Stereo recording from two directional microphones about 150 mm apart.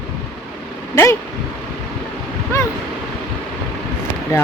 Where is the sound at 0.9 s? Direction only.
20° left (ahead or behind).